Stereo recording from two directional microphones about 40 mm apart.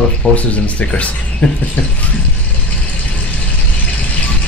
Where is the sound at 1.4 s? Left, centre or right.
Left.